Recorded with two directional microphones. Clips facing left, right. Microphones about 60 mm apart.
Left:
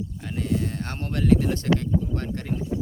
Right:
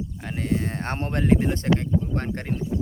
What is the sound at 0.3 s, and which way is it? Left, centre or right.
Speech, right.